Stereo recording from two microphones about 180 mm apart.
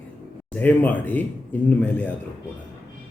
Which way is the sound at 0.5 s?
10° left (ahead or behind).